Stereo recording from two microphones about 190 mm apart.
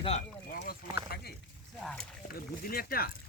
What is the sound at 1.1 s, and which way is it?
Speech, 55° left (ahead or behind).